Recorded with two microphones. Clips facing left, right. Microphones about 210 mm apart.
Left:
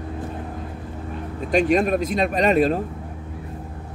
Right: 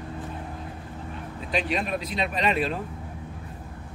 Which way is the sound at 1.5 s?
45° left (ahead or behind).